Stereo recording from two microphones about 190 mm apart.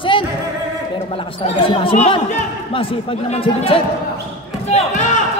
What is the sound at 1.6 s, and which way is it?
Speech, 30° left (ahead or behind).